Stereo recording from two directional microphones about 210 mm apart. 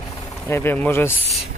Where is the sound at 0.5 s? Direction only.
10° left (ahead or behind).